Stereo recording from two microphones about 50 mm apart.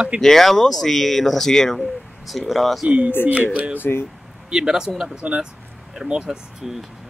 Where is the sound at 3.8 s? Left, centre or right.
Left.